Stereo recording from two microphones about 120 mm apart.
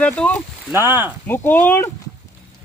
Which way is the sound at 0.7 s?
20° right (ahead or behind).